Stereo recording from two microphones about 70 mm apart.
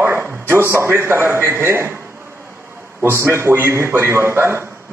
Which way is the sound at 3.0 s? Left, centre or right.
Right.